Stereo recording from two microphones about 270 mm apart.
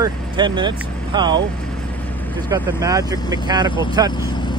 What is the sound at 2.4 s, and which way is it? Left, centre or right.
Speech, centre.